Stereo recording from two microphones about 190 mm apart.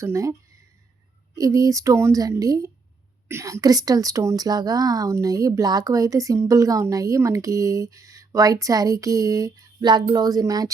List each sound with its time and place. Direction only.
0.0 s a woman's voice: 15° right (ahead or behind)
1.4 s a woman's voice: 20° right (ahead or behind)